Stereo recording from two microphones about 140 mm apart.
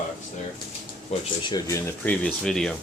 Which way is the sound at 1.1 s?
50° left (ahead or behind).